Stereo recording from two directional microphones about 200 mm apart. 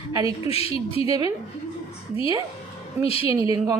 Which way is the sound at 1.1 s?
15° right (ahead or behind).